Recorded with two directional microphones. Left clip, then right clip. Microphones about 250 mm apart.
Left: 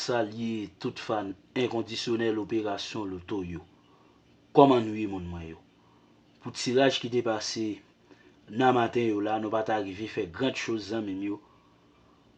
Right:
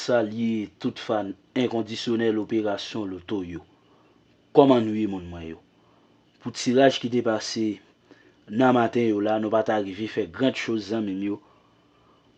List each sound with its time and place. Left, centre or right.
0.0 s speech: right